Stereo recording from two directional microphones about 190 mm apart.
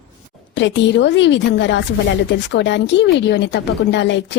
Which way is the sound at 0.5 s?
70° left (ahead or behind).